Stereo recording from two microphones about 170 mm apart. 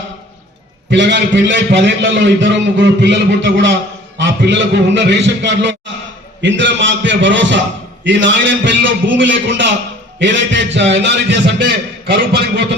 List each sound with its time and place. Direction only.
0.9 s a man's voice: 90° right; by 12.6 s 75° right (ahead or behind)